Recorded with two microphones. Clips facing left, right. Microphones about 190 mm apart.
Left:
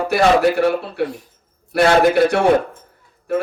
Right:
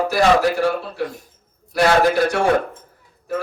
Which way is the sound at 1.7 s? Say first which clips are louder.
Left 2 dB; 65° left (ahead or behind).